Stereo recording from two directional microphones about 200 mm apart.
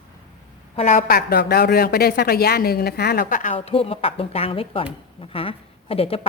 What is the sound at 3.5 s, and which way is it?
A woman's voice, 30° left (ahead or behind).